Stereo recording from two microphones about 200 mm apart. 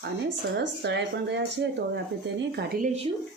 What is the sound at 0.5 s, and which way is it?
Speech, 55° right (ahead or behind).